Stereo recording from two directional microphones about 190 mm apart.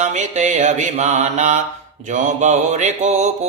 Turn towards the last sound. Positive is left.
turn(degrees=-40)  # may be behind; listen again after turning